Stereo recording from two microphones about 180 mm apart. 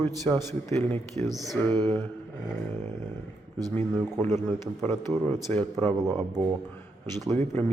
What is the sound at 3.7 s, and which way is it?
A man's voice, 10° left (ahead or behind).